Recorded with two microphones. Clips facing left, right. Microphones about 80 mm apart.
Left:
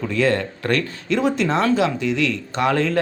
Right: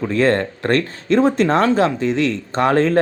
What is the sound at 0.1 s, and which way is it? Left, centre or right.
Speech, right.